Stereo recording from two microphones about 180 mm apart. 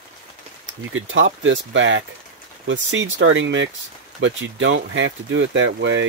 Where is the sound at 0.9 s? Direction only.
90° right.